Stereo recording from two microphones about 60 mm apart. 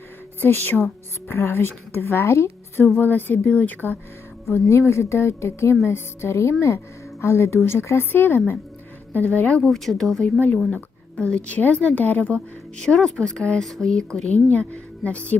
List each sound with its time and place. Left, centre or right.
0.4 s speech: left
2.8 s speech: left
4.4 s speech: left
9.1 s speech: left
9.6 s speech: centre
11.5 s speech: left
12.8 s speech: centre
14.5 s speech: left